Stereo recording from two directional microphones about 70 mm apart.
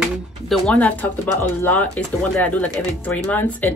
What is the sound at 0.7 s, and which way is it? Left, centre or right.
Speech, left.